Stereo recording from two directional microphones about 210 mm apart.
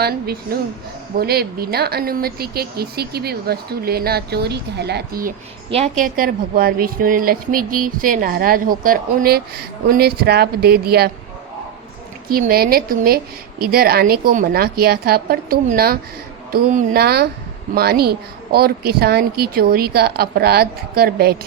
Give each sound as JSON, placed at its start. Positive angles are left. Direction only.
{"t": 0.0, "sound": "a woman's voice", "side_deg": -50}
{"t": 5.7, "sound": "a woman's voice", "side_deg": -35}
{"t": 12.3, "sound": "a woman's voice", "side_deg": -45}